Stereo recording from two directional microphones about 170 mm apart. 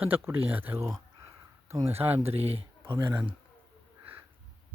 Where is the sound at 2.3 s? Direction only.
35° right (ahead or behind).